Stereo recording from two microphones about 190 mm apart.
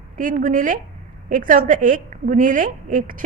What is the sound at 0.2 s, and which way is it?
A woman's voice, 45° right (ahead or behind).